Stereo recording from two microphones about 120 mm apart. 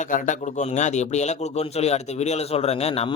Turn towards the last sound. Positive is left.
turn(degrees=60)  # may be behind; listen again after turning